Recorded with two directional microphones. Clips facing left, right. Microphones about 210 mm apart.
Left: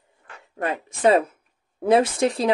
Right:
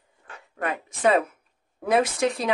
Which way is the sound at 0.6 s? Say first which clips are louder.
Left 3 dB; 30° left (ahead or behind).